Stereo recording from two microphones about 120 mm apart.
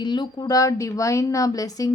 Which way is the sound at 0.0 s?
40° left (ahead or behind).